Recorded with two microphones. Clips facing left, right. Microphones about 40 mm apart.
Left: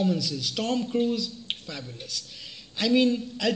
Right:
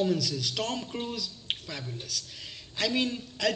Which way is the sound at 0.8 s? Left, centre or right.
Centre.